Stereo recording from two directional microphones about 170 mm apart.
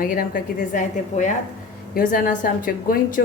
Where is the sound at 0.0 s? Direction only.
55° left (ahead or behind).